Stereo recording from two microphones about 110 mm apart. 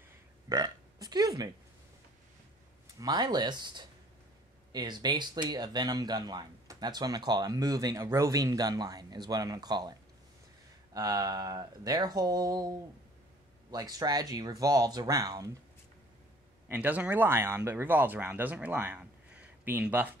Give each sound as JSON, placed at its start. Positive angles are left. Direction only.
{"t": 0.5, "sound": "burping", "side_deg": -35}
{"t": 3.0, "sound": "speech", "side_deg": -40}
{"t": 16.7, "sound": "speech", "side_deg": -10}